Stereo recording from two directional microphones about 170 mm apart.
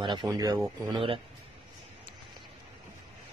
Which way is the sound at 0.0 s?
25° right (ahead or behind).